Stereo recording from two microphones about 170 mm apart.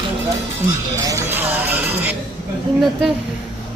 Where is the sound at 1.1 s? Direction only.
15° right (ahead or behind).